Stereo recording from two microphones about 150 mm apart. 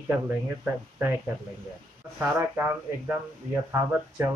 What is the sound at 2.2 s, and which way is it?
Speech, 10° right (ahead or behind).